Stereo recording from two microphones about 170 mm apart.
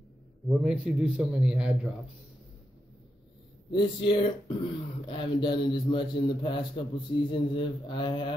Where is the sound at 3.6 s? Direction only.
30° left (ahead or behind).